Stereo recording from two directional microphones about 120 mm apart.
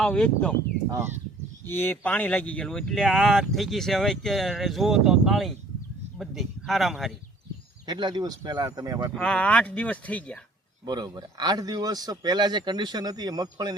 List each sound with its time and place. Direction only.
0.0 s speech: 10° left (ahead or behind)
0.9 s speech: 20° right (ahead or behind)
1.6 s speech: 15° left (ahead or behind); by 7.2 s centre (ahead or behind)
7.9 s speech: 40° right (ahead or behind)
9.1 s speech: 10° left (ahead or behind)
10.8 s speech: 35° right (ahead or behind)